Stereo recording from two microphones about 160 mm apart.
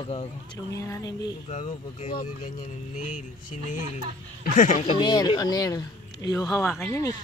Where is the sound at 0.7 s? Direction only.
20° left (ahead or behind).